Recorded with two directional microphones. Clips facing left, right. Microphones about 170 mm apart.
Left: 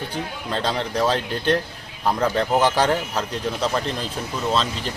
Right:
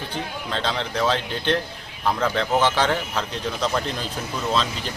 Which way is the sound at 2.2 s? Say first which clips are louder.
Left 2 dB; 10° left (ahead or behind).